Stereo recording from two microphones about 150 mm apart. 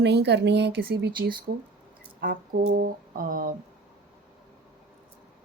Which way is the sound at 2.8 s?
70° right (ahead or behind).